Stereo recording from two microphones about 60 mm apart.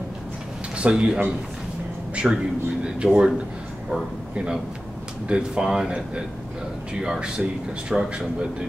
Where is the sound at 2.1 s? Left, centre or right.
Centre.